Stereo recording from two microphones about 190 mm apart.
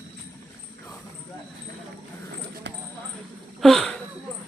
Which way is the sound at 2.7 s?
65° right (ahead or behind).